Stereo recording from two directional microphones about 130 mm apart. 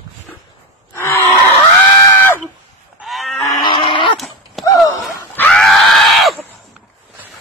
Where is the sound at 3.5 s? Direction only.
35° left (ahead or behind).